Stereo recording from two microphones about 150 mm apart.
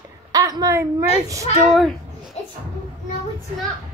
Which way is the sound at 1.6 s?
Centre (ahead or behind).